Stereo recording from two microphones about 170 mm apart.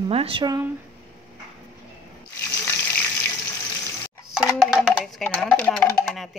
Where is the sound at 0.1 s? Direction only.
35° right (ahead or behind).